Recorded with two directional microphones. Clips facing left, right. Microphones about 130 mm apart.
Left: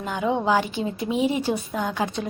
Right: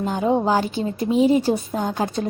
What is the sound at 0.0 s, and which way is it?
A woman's voice, 35° right (ahead or behind).